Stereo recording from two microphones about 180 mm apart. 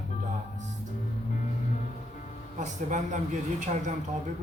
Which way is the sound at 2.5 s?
40° right (ahead or behind).